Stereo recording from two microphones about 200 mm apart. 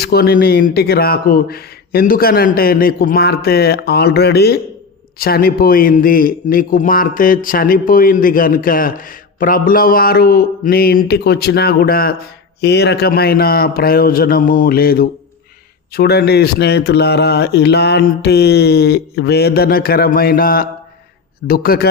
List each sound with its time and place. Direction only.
0.0 s a man's voice: 50° left (ahead or behind)